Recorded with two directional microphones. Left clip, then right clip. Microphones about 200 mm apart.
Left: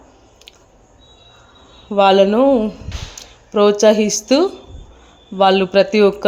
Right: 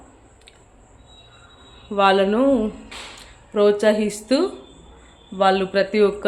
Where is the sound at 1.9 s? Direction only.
25° left (ahead or behind).